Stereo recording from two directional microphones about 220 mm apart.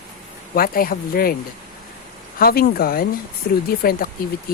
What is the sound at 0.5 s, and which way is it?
Speech, 40° left (ahead or behind).